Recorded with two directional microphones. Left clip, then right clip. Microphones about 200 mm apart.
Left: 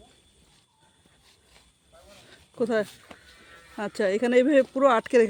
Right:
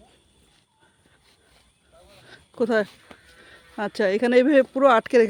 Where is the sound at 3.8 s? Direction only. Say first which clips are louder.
Right 3 dB; 15° right (ahead or behind).